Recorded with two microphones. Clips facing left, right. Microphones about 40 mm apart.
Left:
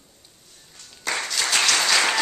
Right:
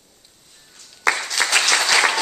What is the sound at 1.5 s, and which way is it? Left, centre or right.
Applause, right.